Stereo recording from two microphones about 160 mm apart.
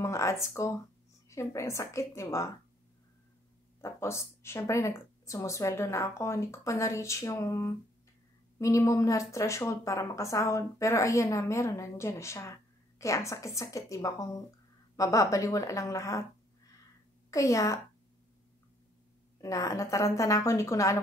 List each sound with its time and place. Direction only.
0.0 s a woman's voice: 20° left (ahead or behind)
3.8 s a woman's voice: 15° left (ahead or behind)
17.3 s speech: 20° left (ahead or behind)
19.4 s speech: 20° left (ahead or behind)